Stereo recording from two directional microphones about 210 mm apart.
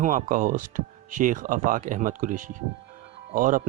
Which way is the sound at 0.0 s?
35° right (ahead or behind).